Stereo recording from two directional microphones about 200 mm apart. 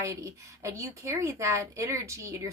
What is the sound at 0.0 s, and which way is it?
Speech, 15° right (ahead or behind).